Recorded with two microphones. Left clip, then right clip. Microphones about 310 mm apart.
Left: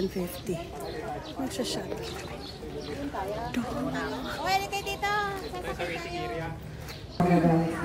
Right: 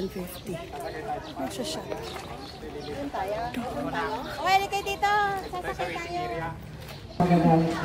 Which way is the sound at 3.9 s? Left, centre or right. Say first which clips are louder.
Right 3 dB; right.